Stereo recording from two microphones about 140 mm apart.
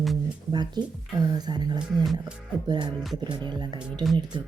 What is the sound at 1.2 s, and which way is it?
Speech, 30° right (ahead or behind).